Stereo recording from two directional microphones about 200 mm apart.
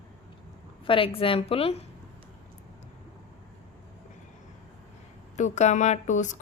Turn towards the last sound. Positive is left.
turn(degrees=40)  # may be behind; listen again after turning